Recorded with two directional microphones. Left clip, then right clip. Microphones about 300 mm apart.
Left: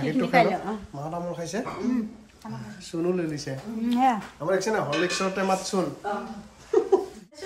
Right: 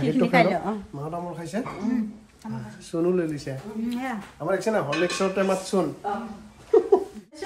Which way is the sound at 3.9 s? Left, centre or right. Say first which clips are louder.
Left 11 dB; left.